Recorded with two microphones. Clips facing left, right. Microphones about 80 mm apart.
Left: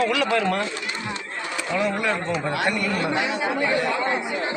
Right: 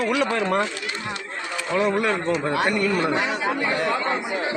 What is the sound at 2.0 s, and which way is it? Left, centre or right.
Speech, right.